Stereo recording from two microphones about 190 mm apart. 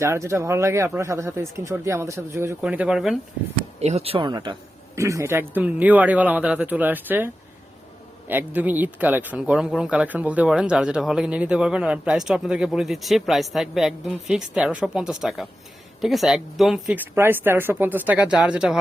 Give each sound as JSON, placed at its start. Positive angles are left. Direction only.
{"t": 0.0, "sound": "speech", "side_deg": -15}
{"t": 3.8, "sound": "speech", "side_deg": -35}
{"t": 8.3, "sound": "speech", "side_deg": -10}